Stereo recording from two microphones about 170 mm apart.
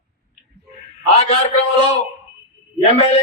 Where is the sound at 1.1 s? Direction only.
40° left (ahead or behind).